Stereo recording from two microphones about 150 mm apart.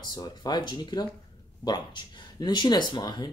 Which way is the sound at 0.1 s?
30° left (ahead or behind).